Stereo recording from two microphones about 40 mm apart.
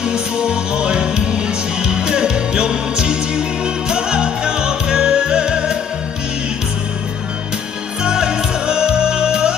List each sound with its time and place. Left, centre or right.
0.0 s music: right
8.0 s music: right